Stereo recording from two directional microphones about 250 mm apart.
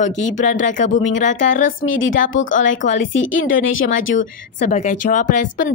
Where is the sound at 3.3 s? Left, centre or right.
Left.